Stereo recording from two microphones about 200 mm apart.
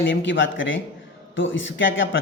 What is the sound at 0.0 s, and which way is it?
Speech, 65° left (ahead or behind).